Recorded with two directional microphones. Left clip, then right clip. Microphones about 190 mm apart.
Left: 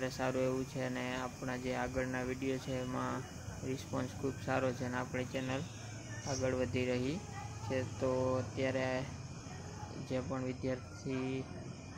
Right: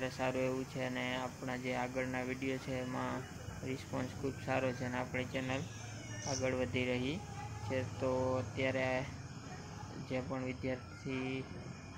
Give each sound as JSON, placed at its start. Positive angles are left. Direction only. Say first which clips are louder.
{"t": 0.0, "sound": "speech", "louder": "left 1 dB", "side_deg": 15}
{"t": 10.0, "sound": "speech", "louder": "left 1 dB", "side_deg": 15}